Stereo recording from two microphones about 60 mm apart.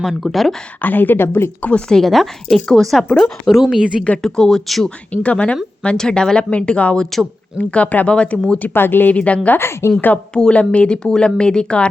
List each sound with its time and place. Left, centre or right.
0.0 s speech: centre
0.8 s speech: left
1.9 s speech: centre
5.1 s speech: left
7.0 s speech: centre
7.6 s speech: left
8.7 s speech: left
9.1 s speech: left
9.6 s a woman's voice: left
10.3 s speech: centre